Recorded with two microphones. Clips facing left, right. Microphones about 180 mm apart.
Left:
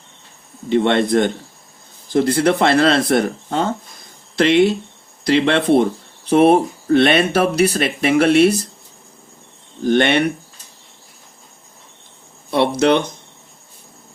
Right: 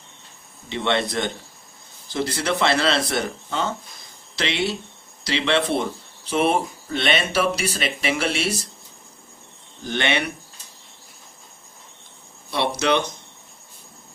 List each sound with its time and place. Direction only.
0.7 s speech: 50° left (ahead or behind)
9.8 s speech: 55° left (ahead or behind)
12.5 s speech: 55° left (ahead or behind)